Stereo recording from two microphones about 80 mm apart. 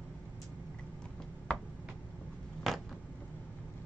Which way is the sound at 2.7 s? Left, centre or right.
Centre.